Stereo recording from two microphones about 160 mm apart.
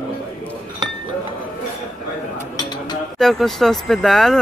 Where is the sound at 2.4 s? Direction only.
25° left (ahead or behind).